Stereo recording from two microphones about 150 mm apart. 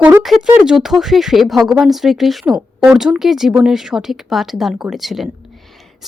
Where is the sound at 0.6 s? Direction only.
5° right (ahead or behind).